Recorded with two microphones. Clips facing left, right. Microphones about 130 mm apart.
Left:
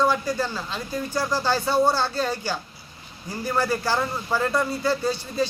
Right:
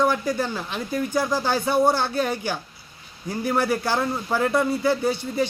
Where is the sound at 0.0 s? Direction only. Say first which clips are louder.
Right 1 dB; 15° right (ahead or behind).